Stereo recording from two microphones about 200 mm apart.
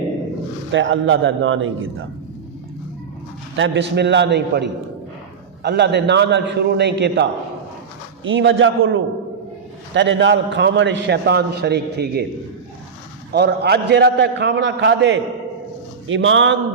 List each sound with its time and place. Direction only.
0.7 s a man's voice: 70° right (ahead or behind); by 2.0 s 85° right
3.5 s a man's voice: 65° right (ahead or behind)
5.6 s a man's voice: 60° right (ahead or behind)
8.2 s a man's voice: 75° right (ahead or behind); by 12.2 s 55° right (ahead or behind)
13.3 s a man's voice: 55° right (ahead or behind)